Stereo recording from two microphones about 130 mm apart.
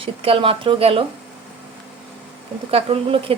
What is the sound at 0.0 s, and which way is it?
A woman's voice, 45° right (ahead or behind).